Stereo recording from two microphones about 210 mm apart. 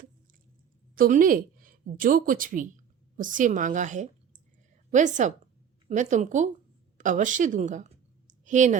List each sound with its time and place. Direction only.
0.9 s a woman's voice: 40° right (ahead or behind)